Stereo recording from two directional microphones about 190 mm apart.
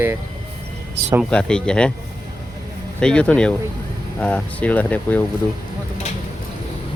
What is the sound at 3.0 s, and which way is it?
Speech, 5° left (ahead or behind).